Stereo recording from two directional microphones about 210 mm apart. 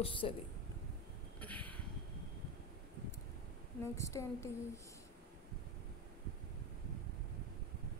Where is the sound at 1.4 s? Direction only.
5° left (ahead or behind).